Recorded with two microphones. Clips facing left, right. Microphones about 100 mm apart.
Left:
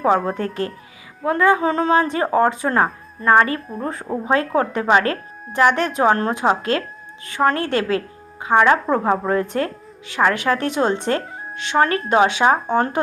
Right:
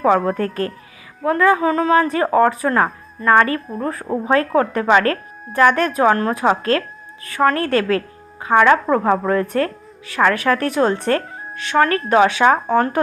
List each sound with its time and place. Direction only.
0.3 s a woman's voice: 25° left (ahead or behind)